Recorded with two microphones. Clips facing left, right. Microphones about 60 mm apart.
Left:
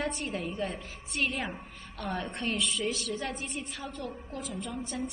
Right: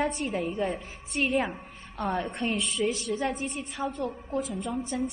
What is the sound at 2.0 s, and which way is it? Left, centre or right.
Speech, right.